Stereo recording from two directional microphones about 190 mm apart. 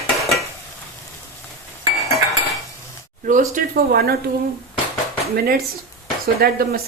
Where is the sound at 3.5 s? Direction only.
55° right (ahead or behind).